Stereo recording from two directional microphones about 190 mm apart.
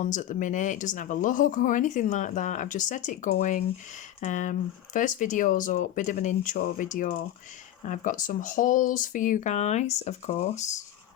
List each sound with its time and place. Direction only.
0.0 s speech: 40° left (ahead or behind)